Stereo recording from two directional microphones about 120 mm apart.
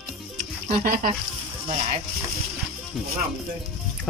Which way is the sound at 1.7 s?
65° right (ahead or behind).